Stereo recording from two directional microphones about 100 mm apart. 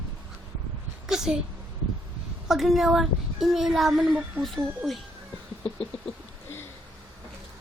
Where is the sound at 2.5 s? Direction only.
Centre (ahead or behind).